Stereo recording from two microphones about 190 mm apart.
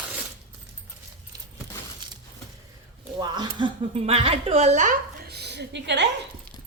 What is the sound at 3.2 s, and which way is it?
A woman's voice, 25° right (ahead or behind).